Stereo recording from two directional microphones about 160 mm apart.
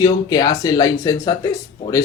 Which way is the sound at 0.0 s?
25° left (ahead or behind).